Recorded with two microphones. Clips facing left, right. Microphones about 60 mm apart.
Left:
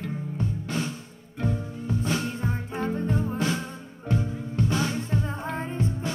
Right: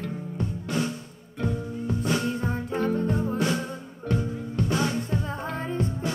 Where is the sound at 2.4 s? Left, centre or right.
Centre.